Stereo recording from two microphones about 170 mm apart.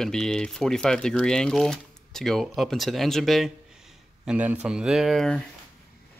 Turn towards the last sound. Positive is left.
turn(degrees=0)  # may be behind; listen again after turning